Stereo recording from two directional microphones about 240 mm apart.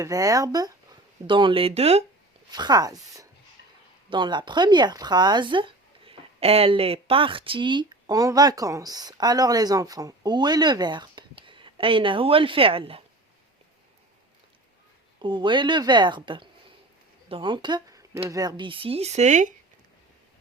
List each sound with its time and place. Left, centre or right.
0.0 s speech: centre
15.2 s speech: centre